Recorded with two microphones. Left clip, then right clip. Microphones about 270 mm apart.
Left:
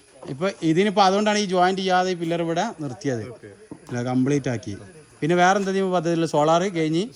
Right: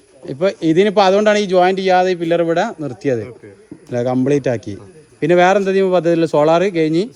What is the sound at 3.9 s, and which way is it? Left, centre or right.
Speech, centre.